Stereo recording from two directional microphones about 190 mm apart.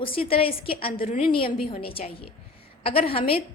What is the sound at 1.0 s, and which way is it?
Speech, 45° left (ahead or behind).